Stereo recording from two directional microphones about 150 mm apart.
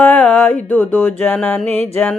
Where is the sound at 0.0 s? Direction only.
10° left (ahead or behind).